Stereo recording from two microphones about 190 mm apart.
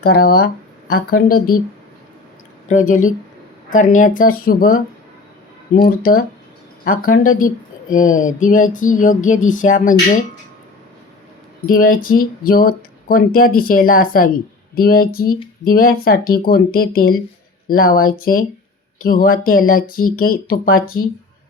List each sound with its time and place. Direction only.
0.0 s speech: 55° left (ahead or behind)
2.6 s speech: 45° left (ahead or behind)
11.6 s speech: 45° left (ahead or behind)